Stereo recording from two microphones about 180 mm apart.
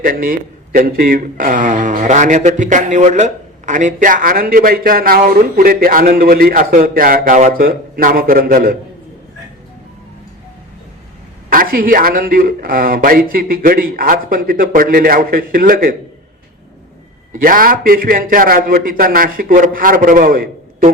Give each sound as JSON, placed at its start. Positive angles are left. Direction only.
{"t": 0.0, "sound": "a man's voice", "side_deg": -50}
{"t": 11.4, "sound": "a man's voice", "side_deg": -50}
{"t": 17.3, "sound": "a man's voice", "side_deg": -50}